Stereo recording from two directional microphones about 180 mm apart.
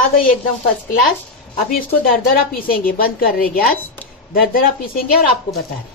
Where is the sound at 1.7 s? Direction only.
55° left (ahead or behind).